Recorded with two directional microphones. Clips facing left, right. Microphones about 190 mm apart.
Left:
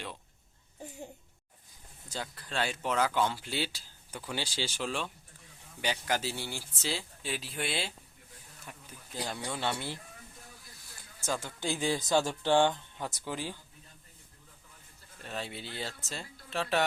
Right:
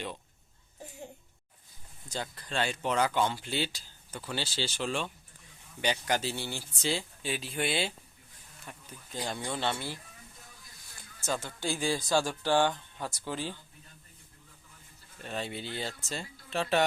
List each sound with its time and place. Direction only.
2.0 s speech: 5° left (ahead or behind)
8.7 s a sound: 5° left (ahead or behind)
9.2 s speech: 5° left (ahead or behind)
11.2 s speech: 10° left (ahead or behind)
15.2 s speech: centre (ahead or behind)